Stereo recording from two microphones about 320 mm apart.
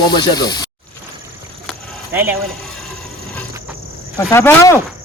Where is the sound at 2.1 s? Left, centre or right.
Centre.